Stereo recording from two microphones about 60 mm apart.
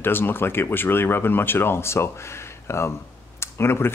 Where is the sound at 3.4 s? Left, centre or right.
Left.